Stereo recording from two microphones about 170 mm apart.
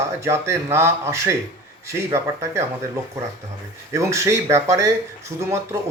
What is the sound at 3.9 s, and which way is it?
Speech, 15° right (ahead or behind).